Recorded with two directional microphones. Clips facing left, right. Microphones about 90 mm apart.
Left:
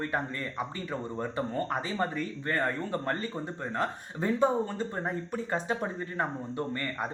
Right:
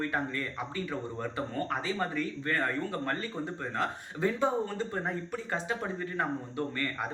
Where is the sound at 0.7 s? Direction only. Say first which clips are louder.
Left 1 dB; 25° left (ahead or behind).